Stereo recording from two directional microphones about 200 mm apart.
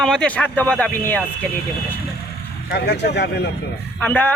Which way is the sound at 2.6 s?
55° left (ahead or behind).